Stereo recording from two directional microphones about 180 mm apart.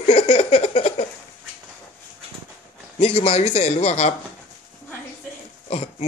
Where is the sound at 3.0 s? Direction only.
35° left (ahead or behind).